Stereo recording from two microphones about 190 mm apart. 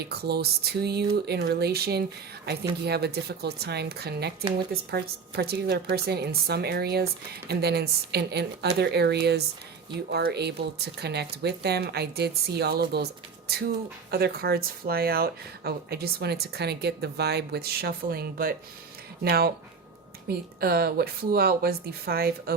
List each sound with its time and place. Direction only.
0.0 s speech: 55° right (ahead or behind)
14.1 s speech: 55° right (ahead or behind)